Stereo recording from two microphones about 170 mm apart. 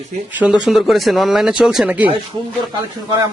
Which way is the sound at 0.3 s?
5° right (ahead or behind).